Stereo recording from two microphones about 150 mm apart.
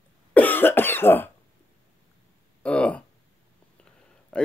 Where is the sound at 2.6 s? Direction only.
10° left (ahead or behind).